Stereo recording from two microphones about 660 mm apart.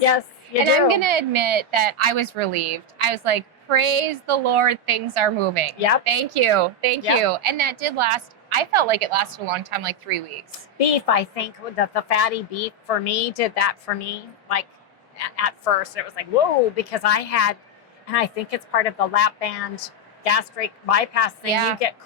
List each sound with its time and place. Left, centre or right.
0.6 s a woman's voice: right
10.8 s a woman's voice: left
21.4 s a woman's voice: right